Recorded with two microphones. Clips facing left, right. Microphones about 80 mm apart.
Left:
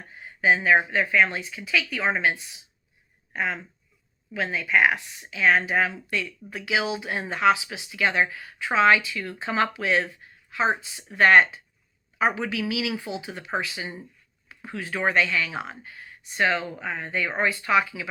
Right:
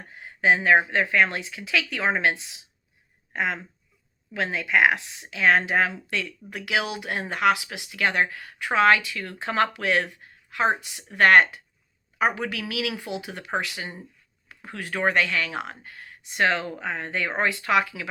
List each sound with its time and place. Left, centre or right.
0.1 s speech: right
14.4 s speech: right